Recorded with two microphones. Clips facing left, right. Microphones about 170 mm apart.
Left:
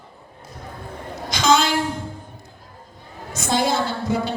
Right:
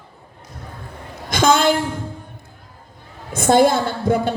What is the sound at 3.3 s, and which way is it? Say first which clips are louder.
A woman's voice: right 7 dB; 55° right (ahead or behind).